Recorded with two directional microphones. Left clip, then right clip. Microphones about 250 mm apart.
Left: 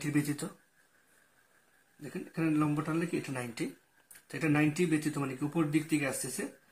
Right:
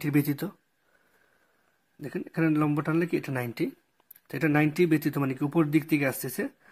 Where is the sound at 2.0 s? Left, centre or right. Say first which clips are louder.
Right 6 dB; right.